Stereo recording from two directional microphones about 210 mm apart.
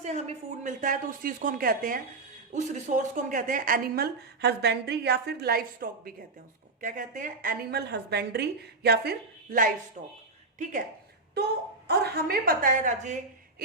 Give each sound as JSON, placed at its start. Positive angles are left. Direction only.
{"t": 0.0, "sound": "a woman's voice", "side_deg": -30}
{"t": 10.0, "sound": "speech", "side_deg": -30}
{"t": 11.9, "sound": "speech", "side_deg": -50}